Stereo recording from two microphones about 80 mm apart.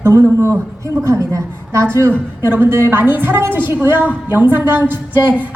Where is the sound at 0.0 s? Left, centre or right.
Right.